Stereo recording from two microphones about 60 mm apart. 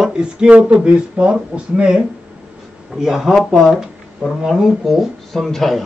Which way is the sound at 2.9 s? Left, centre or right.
Centre.